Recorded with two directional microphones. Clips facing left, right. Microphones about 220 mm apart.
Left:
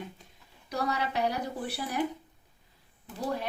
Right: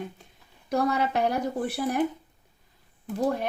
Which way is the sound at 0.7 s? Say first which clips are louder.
Right 6 dB; 50° right (ahead or behind).